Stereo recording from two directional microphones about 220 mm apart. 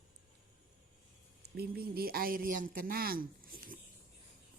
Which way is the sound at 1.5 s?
45° right (ahead or behind).